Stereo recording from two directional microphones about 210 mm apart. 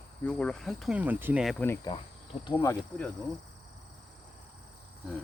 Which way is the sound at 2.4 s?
20° left (ahead or behind).